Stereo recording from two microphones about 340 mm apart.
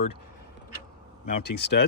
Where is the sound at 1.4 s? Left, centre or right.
Left.